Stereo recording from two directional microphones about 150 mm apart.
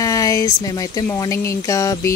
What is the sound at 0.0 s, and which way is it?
Speech, 20° left (ahead or behind).